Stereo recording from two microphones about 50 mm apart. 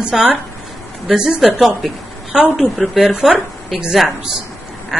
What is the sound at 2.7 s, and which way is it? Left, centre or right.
Speech, centre.